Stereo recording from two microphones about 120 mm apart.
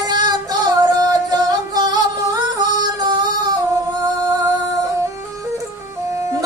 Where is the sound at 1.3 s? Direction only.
30° right (ahead or behind).